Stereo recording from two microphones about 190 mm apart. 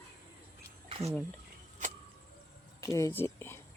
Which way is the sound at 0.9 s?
30° right (ahead or behind).